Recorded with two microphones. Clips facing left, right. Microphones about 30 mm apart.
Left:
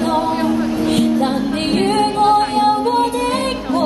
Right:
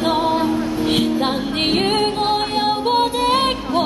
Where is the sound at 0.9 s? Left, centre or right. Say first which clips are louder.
Left 2 dB; right.